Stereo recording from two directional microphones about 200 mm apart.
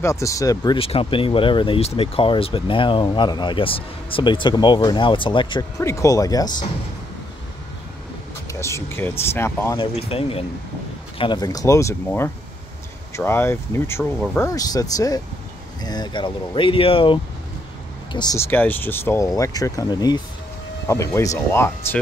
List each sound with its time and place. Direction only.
0.0 s speech: 15° left (ahead or behind)
0.7 s speech: 30° left (ahead or behind)
8.5 s speech: 15° left (ahead or behind)
9.8 s speech: 30° left (ahead or behind); by 22.0 s 10° left (ahead or behind)